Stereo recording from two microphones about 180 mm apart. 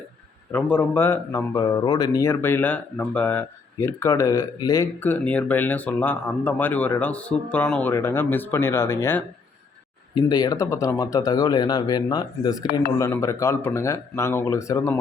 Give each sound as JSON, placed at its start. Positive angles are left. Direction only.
{"t": 0.5, "sound": "speech", "side_deg": 10}